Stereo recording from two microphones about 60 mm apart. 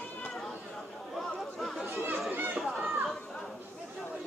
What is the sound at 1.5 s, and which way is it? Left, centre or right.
Chatter, centre.